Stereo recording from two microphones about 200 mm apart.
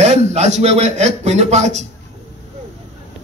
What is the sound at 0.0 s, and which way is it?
A man's voice, 35° right (ahead or behind).